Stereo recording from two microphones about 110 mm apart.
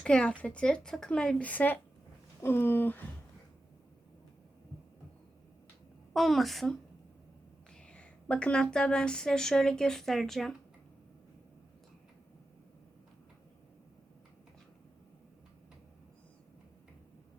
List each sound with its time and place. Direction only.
0.0 s speech: 10° left (ahead or behind)
6.1 s a woman's voice: centre (ahead or behind)